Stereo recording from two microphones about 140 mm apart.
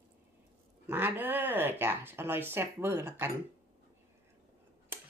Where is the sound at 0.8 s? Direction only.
15° right (ahead or behind).